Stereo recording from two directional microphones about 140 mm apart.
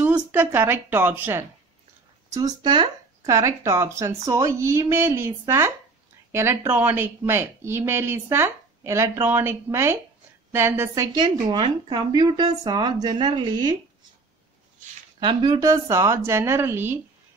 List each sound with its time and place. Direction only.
0.0 s speech: 15° right (ahead or behind)
2.3 s speech: 30° right (ahead or behind)
11.1 s speech: 30° right (ahead or behind)
15.1 s speech: 35° right (ahead or behind)
15.6 s speech: 20° right (ahead or behind)